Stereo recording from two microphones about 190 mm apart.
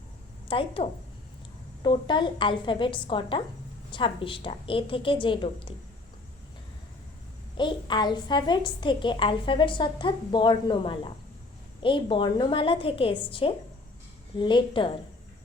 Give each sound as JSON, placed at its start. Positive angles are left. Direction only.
{"t": 0.4, "sound": "a woman's voice", "side_deg": 30}
{"t": 7.5, "sound": "a woman's voice", "side_deg": 25}